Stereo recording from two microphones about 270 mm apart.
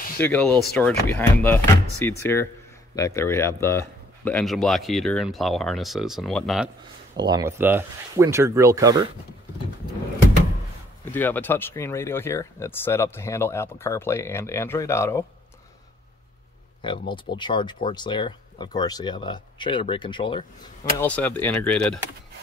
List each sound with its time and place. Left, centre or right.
0.2 s speech: centre
7.2 s speech: centre
11.1 s speech: centre
17.1 s speech: centre
21.0 s speech: centre